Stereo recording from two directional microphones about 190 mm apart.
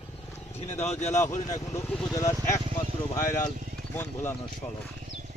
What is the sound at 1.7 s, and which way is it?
Speech, 15° left (ahead or behind).